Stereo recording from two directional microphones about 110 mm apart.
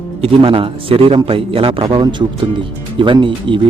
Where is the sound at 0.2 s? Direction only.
55° right (ahead or behind).